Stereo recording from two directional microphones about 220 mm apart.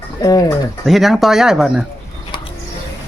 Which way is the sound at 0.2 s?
15° left (ahead or behind).